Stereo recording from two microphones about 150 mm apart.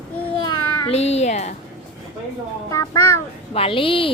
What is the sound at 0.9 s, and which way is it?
Speech, 45° left (ahead or behind).